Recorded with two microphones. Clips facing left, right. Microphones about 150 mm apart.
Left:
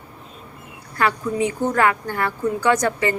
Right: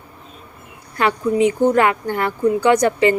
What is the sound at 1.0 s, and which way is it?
Speech, 20° right (ahead or behind).